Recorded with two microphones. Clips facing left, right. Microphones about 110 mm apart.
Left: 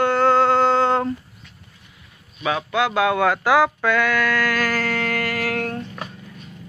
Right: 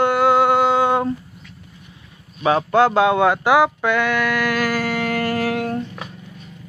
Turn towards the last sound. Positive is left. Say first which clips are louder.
# right 4 dB
turn(degrees=-15)  # may be behind; listen again after turning